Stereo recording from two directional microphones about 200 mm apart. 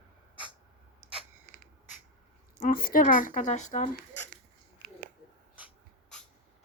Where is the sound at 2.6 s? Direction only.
45° left (ahead or behind).